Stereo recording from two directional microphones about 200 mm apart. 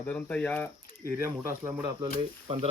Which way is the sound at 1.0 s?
10° right (ahead or behind).